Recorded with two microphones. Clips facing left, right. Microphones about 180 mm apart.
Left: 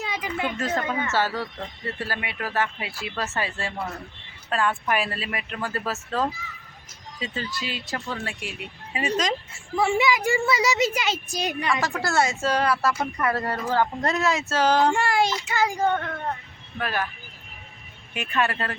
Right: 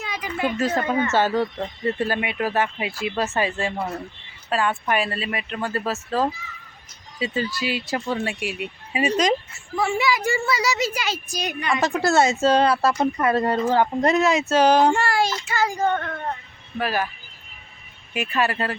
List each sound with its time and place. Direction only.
0.0 s a sound: 25° left (ahead or behind)
0.5 s speech: 5° right (ahead or behind)
0.8 s speech: 45° right (ahead or behind)
1.1 s speech: 20° right (ahead or behind)
4.4 s speech: centre (ahead or behind); by 9.3 s 15° right (ahead or behind)
9.8 s a woman's voice: 20° left (ahead or behind)
11.7 s speech: 20° right (ahead or behind)
15.0 s a woman's voice: 20° left (ahead or behind)
16.7 s speech: 10° right (ahead or behind)
18.1 s speech: 5° right (ahead or behind)